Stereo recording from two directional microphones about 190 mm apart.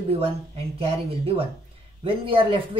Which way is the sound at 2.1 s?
30° right (ahead or behind).